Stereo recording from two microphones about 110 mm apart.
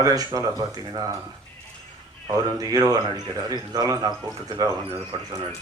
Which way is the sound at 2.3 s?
35° right (ahead or behind).